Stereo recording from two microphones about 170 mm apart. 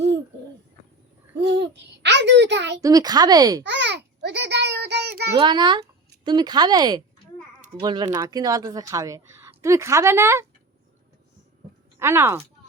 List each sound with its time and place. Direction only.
1.4 s a child's voice: 85° right
2.8 s speech: 20° right (ahead or behind)
3.6 s a sound: 90° right
5.4 s speech: 25° right (ahead or behind)
11.9 s speech: 15° right (ahead or behind)